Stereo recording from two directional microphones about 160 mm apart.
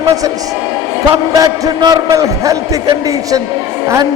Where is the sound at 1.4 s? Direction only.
25° right (ahead or behind).